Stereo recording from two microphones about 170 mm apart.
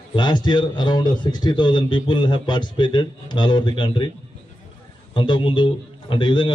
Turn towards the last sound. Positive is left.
turn(degrees=25)  # may be behind; listen again after turning